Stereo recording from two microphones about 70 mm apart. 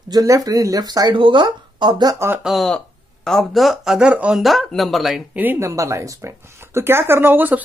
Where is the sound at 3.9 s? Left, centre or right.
Centre.